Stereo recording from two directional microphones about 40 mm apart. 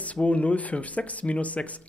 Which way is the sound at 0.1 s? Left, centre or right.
Left.